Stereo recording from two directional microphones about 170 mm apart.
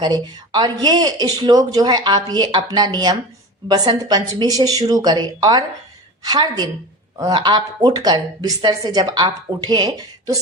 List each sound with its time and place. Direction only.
0.0 s a woman's voice: 25° right (ahead or behind)